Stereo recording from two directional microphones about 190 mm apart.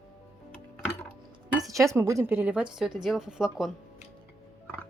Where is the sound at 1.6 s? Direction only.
15° right (ahead or behind); by 3.7 s centre (ahead or behind).